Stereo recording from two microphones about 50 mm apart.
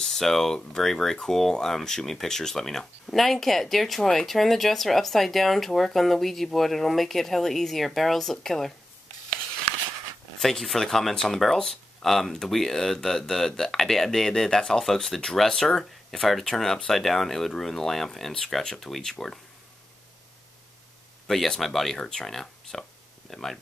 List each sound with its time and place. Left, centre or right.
0.0 s speech: centre
10.4 s speech: centre
21.5 s speech: centre